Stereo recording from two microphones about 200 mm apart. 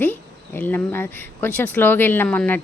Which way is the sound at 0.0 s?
10° left (ahead or behind).